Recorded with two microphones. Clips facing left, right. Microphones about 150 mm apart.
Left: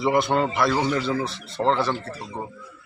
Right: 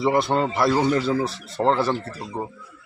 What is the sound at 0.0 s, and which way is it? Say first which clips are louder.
A man's voice: right 1 dB; 30° right (ahead or behind).